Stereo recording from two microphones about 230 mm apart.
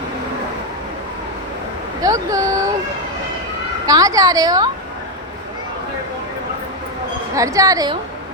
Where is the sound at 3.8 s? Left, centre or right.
Centre.